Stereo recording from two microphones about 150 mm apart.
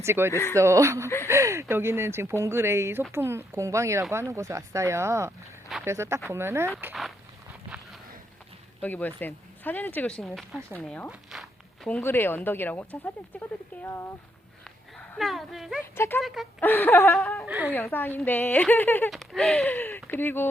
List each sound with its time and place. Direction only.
0.0 s speech: 15° right (ahead or behind)
8.8 s speech: 10° left (ahead or behind)
11.1 s walk: centre (ahead or behind)
11.9 s speech: 15° left (ahead or behind)
14.6 s dog: 5° left (ahead or behind)
15.8 s speech: 15° left (ahead or behind)
16.2 s speech: centre (ahead or behind)
16.6 s speech: 15° left (ahead or behind)
17.4 s speech: 5° right (ahead or behind)
17.7 s speech: 15° left (ahead or behind)
19.1 s speech: centre (ahead or behind)